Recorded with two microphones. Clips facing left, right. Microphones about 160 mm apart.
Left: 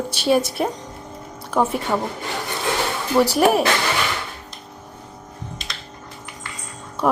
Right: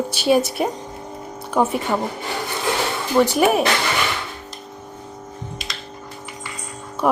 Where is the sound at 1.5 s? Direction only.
Centre (ahead or behind).